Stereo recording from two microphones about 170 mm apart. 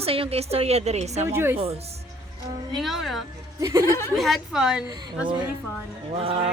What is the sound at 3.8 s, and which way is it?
Speech, 15° left (ahead or behind).